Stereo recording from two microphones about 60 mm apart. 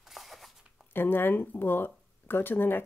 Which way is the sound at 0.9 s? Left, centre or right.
Left.